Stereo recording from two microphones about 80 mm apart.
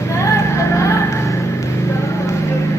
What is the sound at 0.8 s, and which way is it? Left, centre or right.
Vehicle, left.